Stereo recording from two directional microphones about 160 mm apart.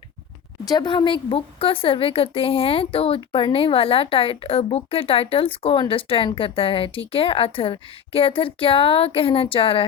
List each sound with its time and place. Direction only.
0.7 s speech: 25° left (ahead or behind)